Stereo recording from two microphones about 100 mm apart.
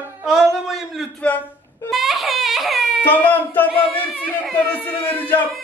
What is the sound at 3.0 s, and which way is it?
Speech, 20° left (ahead or behind).